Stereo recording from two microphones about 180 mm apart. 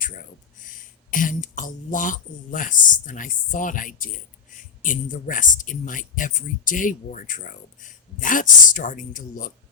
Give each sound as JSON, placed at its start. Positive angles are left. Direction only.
{"t": 0.6, "sound": "speech", "side_deg": 50}